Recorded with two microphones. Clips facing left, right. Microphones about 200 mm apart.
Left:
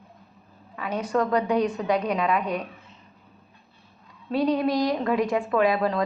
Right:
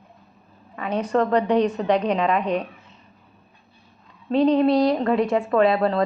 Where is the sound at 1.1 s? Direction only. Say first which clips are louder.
Right 3 dB; 35° right (ahead or behind).